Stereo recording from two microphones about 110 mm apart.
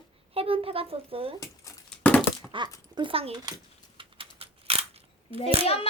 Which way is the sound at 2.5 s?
50° right (ahead or behind).